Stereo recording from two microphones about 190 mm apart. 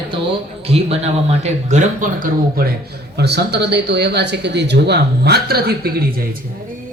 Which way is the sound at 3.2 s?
60° right (ahead or behind).